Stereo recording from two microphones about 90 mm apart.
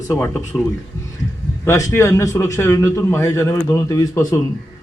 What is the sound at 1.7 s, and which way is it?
A man's voice, 35° left (ahead or behind).